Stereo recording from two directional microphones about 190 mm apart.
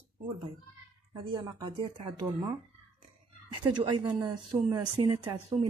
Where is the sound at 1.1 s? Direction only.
25° right (ahead or behind).